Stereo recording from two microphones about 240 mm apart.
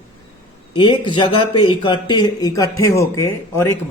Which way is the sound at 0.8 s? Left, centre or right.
Centre.